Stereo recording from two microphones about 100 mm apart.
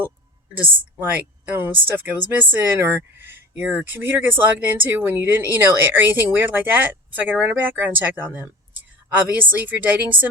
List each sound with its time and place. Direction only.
0.8 s speech: 15° right (ahead or behind)